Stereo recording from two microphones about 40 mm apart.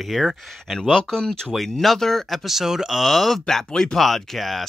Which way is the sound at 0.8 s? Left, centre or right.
Centre.